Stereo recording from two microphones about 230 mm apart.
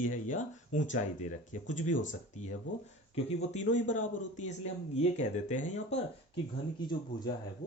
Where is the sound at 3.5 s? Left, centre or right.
Left.